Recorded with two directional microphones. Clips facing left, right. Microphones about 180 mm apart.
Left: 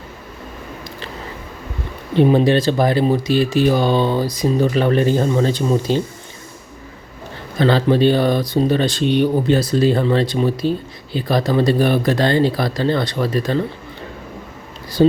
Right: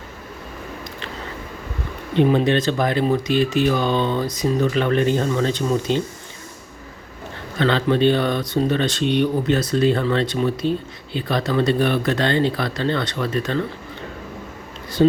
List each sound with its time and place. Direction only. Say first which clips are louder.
2.1 s speech: left 3 dB; 35° left (ahead or behind)
7.6 s speech: left 3 dB; 35° left (ahead or behind)